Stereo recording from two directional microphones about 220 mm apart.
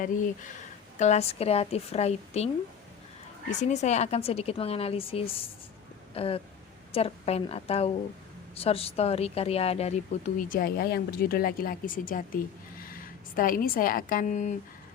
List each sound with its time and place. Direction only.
0.9 s a woman's voice: 30° left (ahead or behind)
3.5 s a woman's voice: 35° left (ahead or behind)